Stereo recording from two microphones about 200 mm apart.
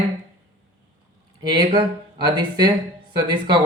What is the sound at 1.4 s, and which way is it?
Speech, 20° right (ahead or behind).